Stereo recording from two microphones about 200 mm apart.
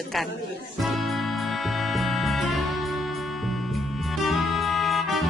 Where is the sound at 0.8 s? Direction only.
Centre (ahead or behind).